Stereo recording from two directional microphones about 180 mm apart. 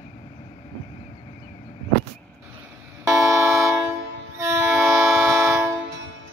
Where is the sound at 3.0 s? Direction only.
20° right (ahead or behind).